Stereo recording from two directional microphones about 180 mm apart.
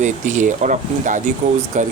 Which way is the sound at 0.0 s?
40° right (ahead or behind).